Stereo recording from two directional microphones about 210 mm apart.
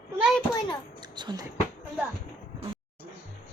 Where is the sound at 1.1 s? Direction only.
20° right (ahead or behind).